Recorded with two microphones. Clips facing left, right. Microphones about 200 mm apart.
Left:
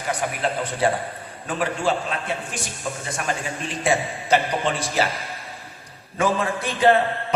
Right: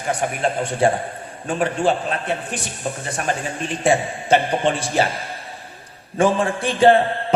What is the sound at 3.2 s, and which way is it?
Speech, 30° right (ahead or behind).